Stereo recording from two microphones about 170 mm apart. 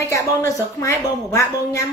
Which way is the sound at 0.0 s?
20° left (ahead or behind).